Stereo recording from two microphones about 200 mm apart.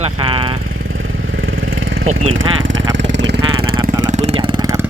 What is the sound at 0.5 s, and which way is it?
Vehicle, 90° right.